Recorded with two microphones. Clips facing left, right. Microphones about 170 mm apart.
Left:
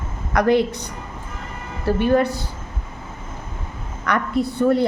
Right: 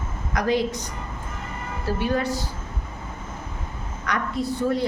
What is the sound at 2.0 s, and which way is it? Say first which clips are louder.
Speech: left 7 dB; 55° left (ahead or behind).